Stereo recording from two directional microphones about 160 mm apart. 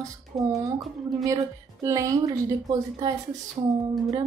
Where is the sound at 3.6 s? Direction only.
30° right (ahead or behind).